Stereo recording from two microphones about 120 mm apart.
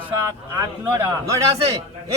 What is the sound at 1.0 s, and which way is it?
Speech, 25° right (ahead or behind).